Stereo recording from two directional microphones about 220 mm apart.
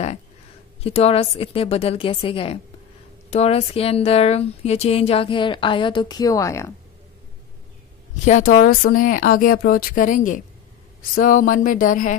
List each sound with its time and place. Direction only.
0.8 s speech: 25° left (ahead or behind)
8.3 s speech: 35° left (ahead or behind)